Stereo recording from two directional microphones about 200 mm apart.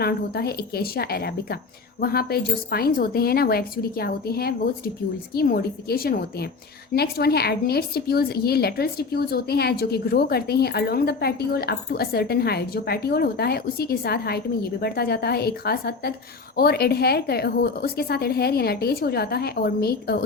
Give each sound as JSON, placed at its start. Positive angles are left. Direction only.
{"t": 0.0, "sound": "a woman's voice", "side_deg": 50}